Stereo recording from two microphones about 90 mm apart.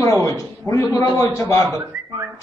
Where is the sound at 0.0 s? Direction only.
35° left (ahead or behind).